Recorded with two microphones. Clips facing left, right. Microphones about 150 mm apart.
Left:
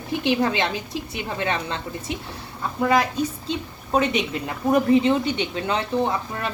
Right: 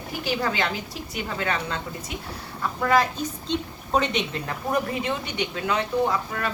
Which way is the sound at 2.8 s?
15° left (ahead or behind).